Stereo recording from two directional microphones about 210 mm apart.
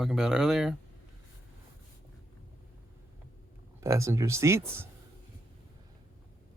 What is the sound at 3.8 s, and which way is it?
Speech, 15° right (ahead or behind).